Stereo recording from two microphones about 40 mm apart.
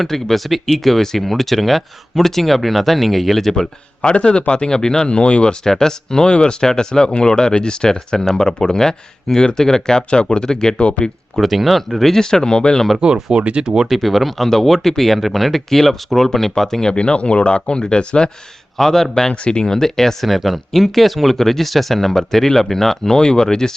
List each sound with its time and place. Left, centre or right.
0.0 s speech: centre
4.0 s speech: left
10.1 s speech: left
10.8 s speech: left
11.3 s speech: centre
13.3 s speech: right
13.9 s speech: centre
16.9 s speech: left
18.8 s speech: centre
19.3 s speech: left